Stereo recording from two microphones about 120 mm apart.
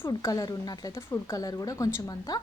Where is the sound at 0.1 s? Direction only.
30° left (ahead or behind).